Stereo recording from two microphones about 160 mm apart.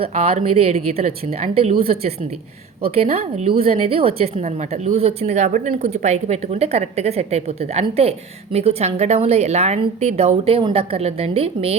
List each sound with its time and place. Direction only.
0.0 s a woman's voice: 35° right (ahead or behind)